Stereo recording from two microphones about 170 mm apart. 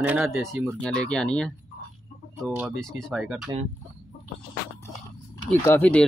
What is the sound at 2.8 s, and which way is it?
Speech, 5° left (ahead or behind).